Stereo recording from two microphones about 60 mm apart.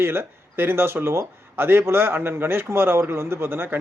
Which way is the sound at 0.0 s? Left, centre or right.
Right.